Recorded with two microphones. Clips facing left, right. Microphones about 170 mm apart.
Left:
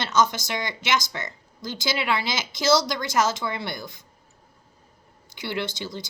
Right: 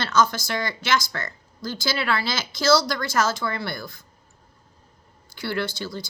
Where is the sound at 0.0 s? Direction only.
20° left (ahead or behind).